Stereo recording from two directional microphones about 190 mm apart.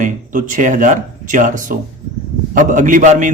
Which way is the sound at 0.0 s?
45° right (ahead or behind).